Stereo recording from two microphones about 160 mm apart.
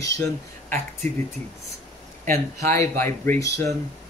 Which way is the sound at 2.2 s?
15° left (ahead or behind).